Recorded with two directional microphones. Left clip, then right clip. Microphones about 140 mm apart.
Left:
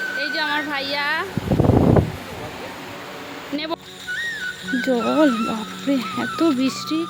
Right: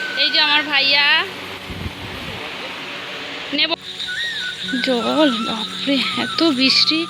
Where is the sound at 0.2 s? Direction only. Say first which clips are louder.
Right 9 dB; 20° left (ahead or behind).